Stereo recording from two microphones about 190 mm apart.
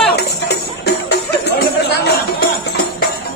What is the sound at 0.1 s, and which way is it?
Music, 60° left (ahead or behind).